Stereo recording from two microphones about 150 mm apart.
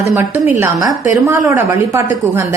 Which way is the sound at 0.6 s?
25° right (ahead or behind).